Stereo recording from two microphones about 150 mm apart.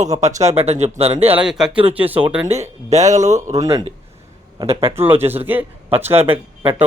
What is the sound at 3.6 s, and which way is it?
Speech, 25° right (ahead or behind).